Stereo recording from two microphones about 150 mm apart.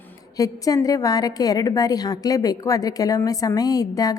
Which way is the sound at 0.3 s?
25° left (ahead or behind).